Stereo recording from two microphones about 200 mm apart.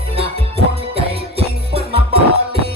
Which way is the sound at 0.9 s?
30° right (ahead or behind).